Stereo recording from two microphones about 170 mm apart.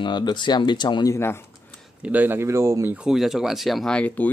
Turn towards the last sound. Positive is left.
turn(degrees=5)  # may be behind; listen again after turning